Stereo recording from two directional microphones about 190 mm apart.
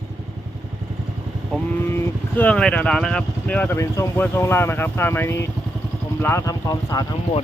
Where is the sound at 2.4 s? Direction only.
5° left (ahead or behind).